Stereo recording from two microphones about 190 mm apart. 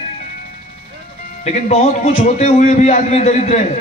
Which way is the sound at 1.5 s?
35° left (ahead or behind).